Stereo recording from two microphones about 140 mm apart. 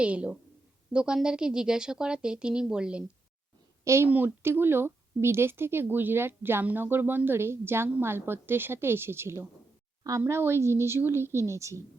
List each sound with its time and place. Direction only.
0.0 s speech: 10° right (ahead or behind)
3.8 s speech: 20° right (ahead or behind)